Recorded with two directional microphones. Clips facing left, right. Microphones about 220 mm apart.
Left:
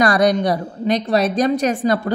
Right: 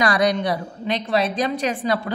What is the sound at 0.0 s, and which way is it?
A woman's voice, 45° left (ahead or behind).